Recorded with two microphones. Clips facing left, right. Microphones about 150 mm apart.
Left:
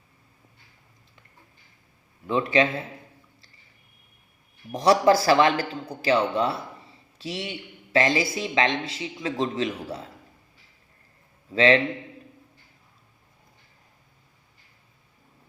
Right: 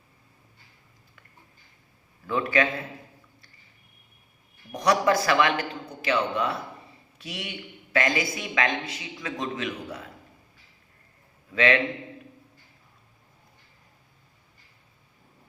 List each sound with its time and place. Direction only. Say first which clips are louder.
2.2 s speech: left 3 dB; 25° left (ahead or behind)
4.7 s speech: left 4 dB; 30° left (ahead or behind)
11.5 s speech: left 4 dB; 30° left (ahead or behind)